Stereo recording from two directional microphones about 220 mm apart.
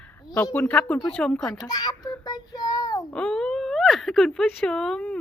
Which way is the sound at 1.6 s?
20° left (ahead or behind).